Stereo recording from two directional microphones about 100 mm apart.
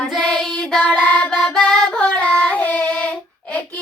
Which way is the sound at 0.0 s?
5° left (ahead or behind).